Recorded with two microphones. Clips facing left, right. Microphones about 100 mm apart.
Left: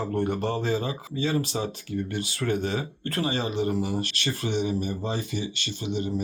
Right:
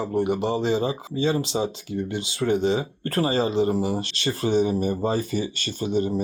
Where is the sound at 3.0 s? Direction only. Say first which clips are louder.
Right 5 dB; 35° right (ahead or behind).